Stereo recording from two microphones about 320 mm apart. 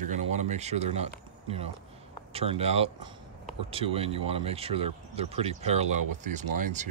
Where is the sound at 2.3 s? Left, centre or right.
Centre.